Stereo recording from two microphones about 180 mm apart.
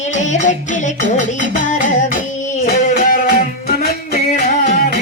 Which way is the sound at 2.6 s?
45° left (ahead or behind).